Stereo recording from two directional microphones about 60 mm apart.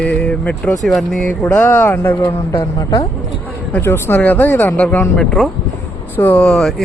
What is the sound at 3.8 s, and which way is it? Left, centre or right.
Speech, left.